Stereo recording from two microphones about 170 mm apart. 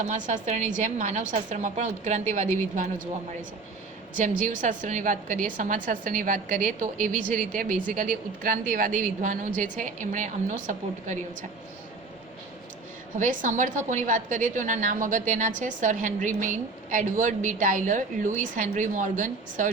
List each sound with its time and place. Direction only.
0.0 s a woman's voice: 45° right (ahead or behind)
4.4 s a woman's voice: 45° right (ahead or behind)
13.1 s a woman's voice: 45° right (ahead or behind)